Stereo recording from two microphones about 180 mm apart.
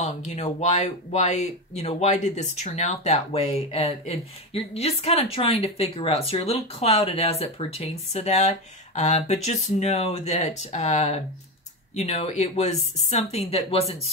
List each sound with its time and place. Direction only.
0.0 s speech: 40° left (ahead or behind)